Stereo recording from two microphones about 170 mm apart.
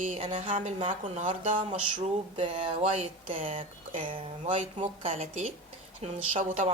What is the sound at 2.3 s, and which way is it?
Speech, 35° right (ahead or behind).